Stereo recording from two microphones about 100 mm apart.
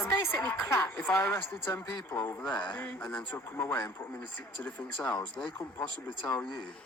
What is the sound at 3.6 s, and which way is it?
Speech, 20° left (ahead or behind).